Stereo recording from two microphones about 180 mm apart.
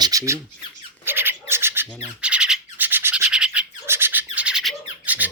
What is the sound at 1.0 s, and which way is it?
Squawk, 10° right (ahead or behind).